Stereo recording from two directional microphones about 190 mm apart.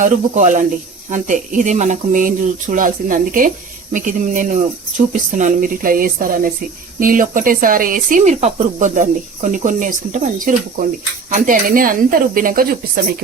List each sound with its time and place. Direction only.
0.0 s speech: 40° right (ahead or behind)